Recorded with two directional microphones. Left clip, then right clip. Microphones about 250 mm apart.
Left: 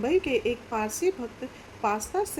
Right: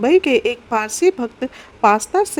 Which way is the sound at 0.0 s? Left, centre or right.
Right.